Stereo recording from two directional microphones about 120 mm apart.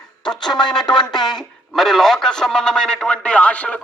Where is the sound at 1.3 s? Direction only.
5° left (ahead or behind).